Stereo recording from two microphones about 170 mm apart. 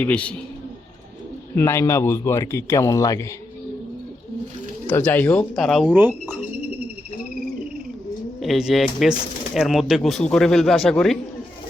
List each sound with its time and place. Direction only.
0.0 s a man's voice: 10° left (ahead or behind)
1.5 s a man's voice: 15° left (ahead or behind)
4.9 s speech: 10° left (ahead or behind); by 6.4 s 10° right (ahead or behind)
8.4 s speech: centre (ahead or behind)